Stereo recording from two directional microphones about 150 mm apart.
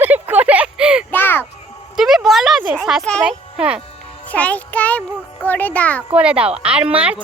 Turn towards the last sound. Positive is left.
turn(degrees=-5)  # may be behind; listen again after turning